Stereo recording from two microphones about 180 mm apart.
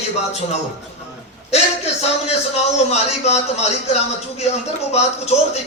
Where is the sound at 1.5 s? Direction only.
35° left (ahead or behind).